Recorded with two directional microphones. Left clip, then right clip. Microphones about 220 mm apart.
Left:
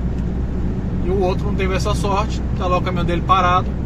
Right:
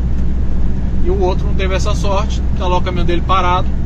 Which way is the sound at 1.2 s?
25° left (ahead or behind).